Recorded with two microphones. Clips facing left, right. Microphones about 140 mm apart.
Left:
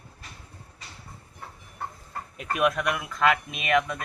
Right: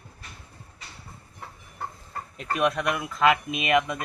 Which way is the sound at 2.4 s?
5° left (ahead or behind).